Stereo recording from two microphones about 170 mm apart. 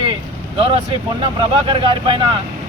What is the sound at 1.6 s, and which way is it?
Speech, 30° right (ahead or behind).